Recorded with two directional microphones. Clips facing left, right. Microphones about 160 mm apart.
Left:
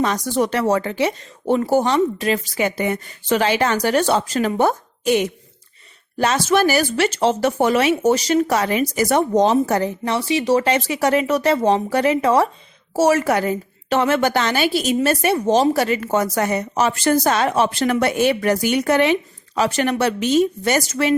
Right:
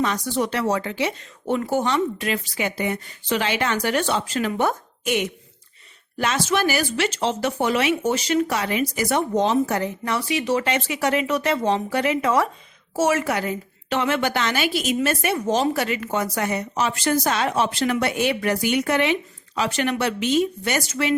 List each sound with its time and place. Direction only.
0.3 s a woman's voice: 45° left (ahead or behind)
10.0 s a woman's voice: 25° left (ahead or behind)